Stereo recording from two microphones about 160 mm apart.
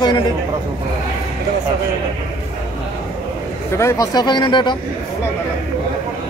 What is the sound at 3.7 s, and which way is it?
Speech, 20° left (ahead or behind).